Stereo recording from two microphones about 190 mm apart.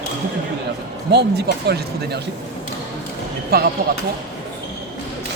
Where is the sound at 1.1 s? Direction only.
60° right (ahead or behind).